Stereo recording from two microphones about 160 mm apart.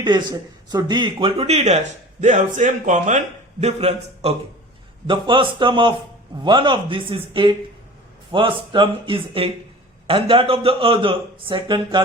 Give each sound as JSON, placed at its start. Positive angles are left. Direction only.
{"t": 0.0, "sound": "a man's voice", "side_deg": -25}